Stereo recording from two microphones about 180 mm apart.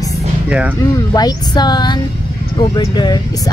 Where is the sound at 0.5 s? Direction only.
5° right (ahead or behind).